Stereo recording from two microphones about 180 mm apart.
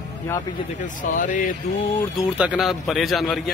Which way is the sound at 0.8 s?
45° left (ahead or behind).